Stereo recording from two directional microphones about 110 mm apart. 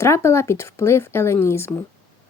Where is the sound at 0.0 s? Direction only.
25° left (ahead or behind).